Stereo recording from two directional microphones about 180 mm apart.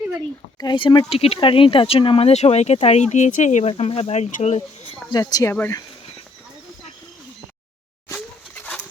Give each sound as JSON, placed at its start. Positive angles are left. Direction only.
{"t": 0.6, "sound": "speech", "side_deg": 25}
{"t": 5.1, "sound": "speech", "side_deg": 20}
{"t": 8.1, "sound": "a sound", "side_deg": 10}